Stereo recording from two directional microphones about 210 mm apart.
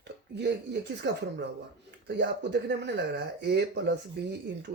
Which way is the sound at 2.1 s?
55° right (ahead or behind).